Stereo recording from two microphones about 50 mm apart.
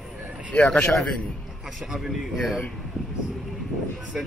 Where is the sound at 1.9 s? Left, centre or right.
Centre.